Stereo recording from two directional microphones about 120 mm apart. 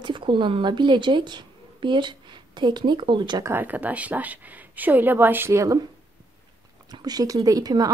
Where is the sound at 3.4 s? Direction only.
15° right (ahead or behind).